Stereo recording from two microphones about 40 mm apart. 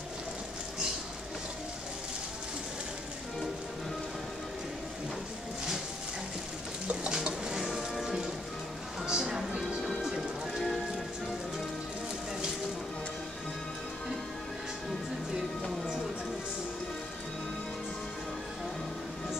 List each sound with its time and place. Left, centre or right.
7.1 s music: centre